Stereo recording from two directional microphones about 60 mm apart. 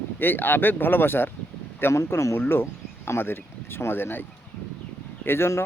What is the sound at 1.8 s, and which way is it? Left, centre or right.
Speech, left.